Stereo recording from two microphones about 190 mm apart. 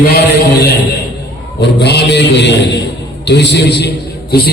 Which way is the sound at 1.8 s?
60° left (ahead or behind).